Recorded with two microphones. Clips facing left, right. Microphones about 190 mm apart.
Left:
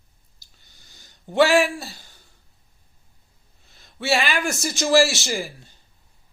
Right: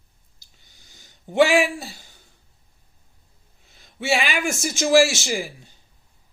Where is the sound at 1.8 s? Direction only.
15° right (ahead or behind).